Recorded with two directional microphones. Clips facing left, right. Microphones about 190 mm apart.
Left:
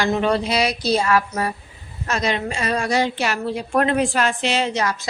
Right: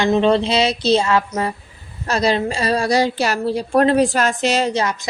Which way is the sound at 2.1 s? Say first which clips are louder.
Right 5 dB; 35° right (ahead or behind).